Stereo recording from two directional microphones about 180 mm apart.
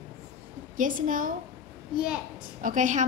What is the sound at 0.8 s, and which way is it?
Speech, 50° right (ahead or behind).